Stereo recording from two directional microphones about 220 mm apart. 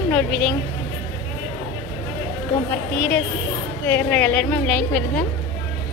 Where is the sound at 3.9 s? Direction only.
10° left (ahead or behind).